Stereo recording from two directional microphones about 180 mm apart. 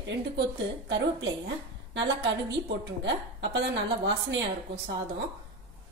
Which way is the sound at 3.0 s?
75° right (ahead or behind).